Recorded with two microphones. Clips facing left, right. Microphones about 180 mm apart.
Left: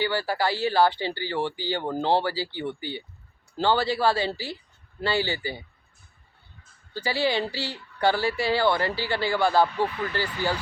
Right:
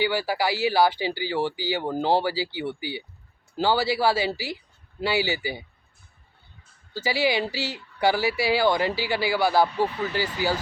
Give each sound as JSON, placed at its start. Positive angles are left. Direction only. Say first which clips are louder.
{"t": 0.0, "sound": "speech", "louder": "right 1 dB", "side_deg": -10}
{"t": 6.9, "sound": "speech", "louder": "right 1 dB", "side_deg": -10}